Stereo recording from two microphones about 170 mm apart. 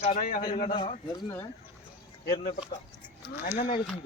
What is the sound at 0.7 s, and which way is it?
Speech, 30° left (ahead or behind).